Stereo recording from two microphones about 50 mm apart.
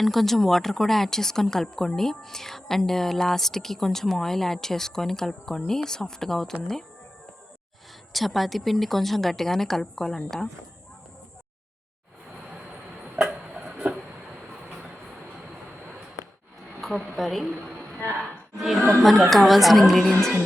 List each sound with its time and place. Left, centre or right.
0.0 s a woman's voice: centre
8.1 s a woman's voice: centre
13.3 s a sound: right
16.8 s a woman's voice: centre